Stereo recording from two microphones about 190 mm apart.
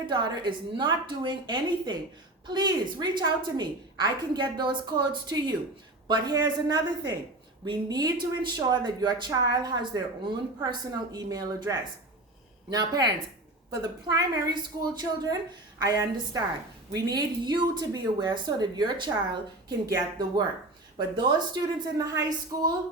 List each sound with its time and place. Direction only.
0.1 s speech: 25° right (ahead or behind)